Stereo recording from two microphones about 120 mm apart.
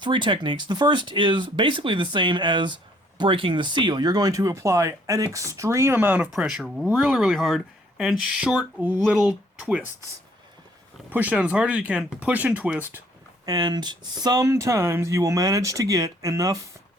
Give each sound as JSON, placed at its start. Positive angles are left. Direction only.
{"t": 0.0, "sound": "speech", "side_deg": -45}
{"t": 11.1, "sound": "speech", "side_deg": -15}
{"t": 13.4, "sound": "speech", "side_deg": -35}